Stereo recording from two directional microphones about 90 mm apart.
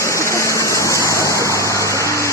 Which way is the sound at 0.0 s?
35° left (ahead or behind).